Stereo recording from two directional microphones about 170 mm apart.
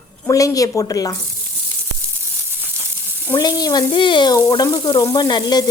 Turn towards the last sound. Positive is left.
turn(degrees=25)  # may be behind; listen again after turning